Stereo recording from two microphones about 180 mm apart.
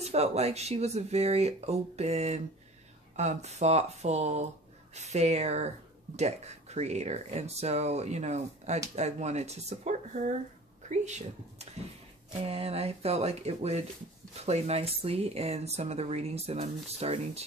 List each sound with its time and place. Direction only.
0.0 s speech: 35° right (ahead or behind)